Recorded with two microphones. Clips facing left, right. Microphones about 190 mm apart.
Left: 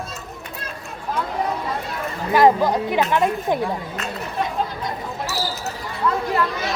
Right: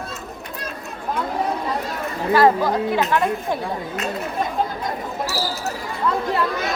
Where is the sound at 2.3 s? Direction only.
15° left (ahead or behind).